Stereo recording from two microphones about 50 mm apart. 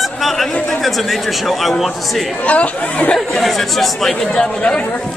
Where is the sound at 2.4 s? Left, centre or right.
Left.